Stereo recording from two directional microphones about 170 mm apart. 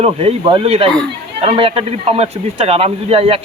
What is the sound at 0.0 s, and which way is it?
Speech, 35° right (ahead or behind).